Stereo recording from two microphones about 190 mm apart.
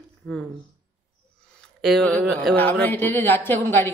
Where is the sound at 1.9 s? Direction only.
5° left (ahead or behind).